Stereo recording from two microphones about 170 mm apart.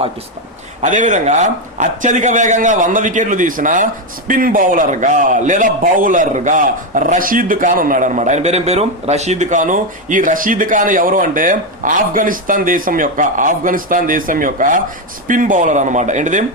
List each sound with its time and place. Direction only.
0.8 s a man's voice: 45° right (ahead or behind)